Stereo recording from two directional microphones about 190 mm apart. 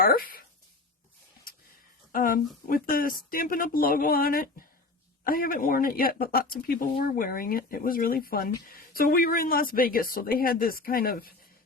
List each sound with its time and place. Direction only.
0.0 s speech: 50° left (ahead or behind)
2.1 s speech: 45° left (ahead or behind)